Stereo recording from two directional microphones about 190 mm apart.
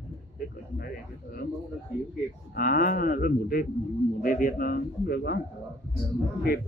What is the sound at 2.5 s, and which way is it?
A man's voice, 45° left (ahead or behind).